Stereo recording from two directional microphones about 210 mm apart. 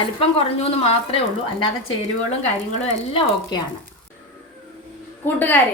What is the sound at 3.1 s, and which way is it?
Speech, 25° left (ahead or behind).